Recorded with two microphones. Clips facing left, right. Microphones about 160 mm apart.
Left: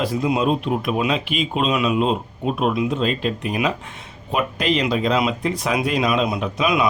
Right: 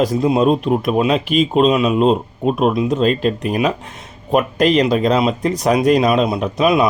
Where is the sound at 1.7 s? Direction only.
30° right (ahead or behind).